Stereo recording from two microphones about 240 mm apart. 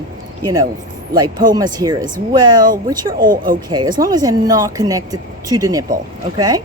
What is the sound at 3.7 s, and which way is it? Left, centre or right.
Speech, centre.